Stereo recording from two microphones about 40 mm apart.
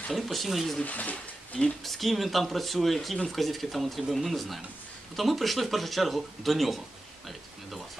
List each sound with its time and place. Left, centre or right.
0.1 s a man's voice: centre
0.8 s speech: left
1.9 s a man's voice: centre